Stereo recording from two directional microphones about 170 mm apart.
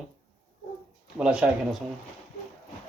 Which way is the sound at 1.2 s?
5° right (ahead or behind).